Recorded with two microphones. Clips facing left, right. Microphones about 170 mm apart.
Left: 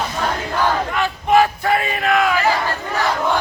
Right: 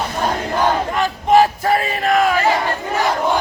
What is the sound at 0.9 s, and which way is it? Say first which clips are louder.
Battle cry: right 2 dB; 40° right (ahead or behind).